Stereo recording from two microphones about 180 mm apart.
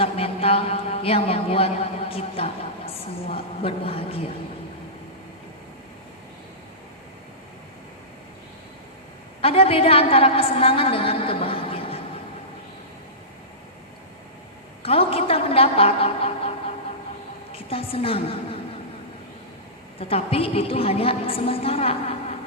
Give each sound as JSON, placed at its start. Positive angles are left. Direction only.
{"t": 0.0, "sound": "a man's voice", "side_deg": 30}
{"t": 9.4, "sound": "a woman's voice", "side_deg": 30}
{"t": 14.8, "sound": "a man's voice", "side_deg": 30}
{"t": 20.0, "sound": "a man's voice", "side_deg": 30}